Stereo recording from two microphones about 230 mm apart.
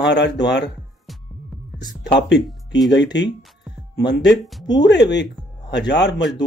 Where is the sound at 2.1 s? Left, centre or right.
Left.